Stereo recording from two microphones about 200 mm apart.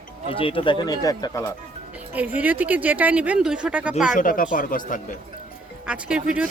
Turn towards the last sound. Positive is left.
turn(degrees=-5)  # may be behind; listen again after turning